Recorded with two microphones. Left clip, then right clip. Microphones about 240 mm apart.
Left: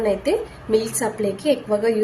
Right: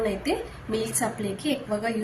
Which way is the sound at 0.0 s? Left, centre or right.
Centre.